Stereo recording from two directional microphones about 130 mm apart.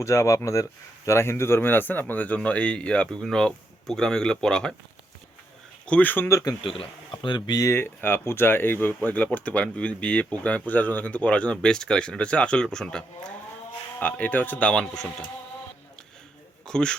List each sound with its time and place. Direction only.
0.0 s speech: 20° left (ahead or behind); by 4.7 s 5° left (ahead or behind)
5.8 s speech: 10° left (ahead or behind)
6.6 s speech: 45° left (ahead or behind); by 15.3 s 5° left (ahead or behind)
16.6 s a man's voice: 5° left (ahead or behind)